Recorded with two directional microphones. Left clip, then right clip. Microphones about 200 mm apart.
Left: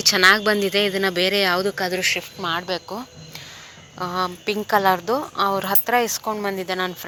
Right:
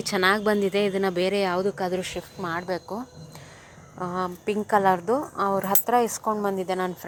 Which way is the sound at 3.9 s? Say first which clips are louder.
Left 5 dB; 10° right (ahead or behind).